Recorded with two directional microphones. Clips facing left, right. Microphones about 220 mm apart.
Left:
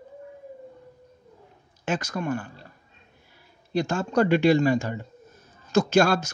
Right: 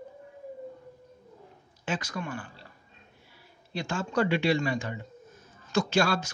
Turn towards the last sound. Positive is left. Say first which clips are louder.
# left 6 dB
turn(degrees=45)  # may be behind; listen again after turning